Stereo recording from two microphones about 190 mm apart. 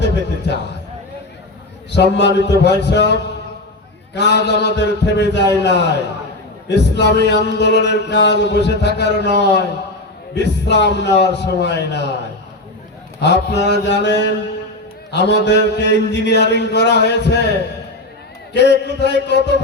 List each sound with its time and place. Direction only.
0.0 s a man's voice: 65° left (ahead or behind)
1.9 s chant: 65° left (ahead or behind)
13.1 s chant: 65° left (ahead or behind)
18.5 s chant: 65° left (ahead or behind)